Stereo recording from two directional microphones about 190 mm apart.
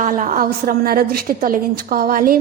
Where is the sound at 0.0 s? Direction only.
45° right (ahead or behind).